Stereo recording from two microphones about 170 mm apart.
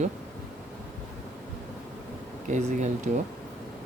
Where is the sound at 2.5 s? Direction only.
45° right (ahead or behind).